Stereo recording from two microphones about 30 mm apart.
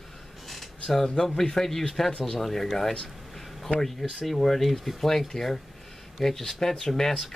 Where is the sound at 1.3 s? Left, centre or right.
Centre.